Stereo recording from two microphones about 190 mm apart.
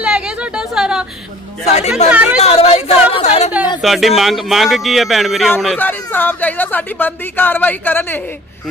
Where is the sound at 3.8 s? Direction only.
Centre (ahead or behind).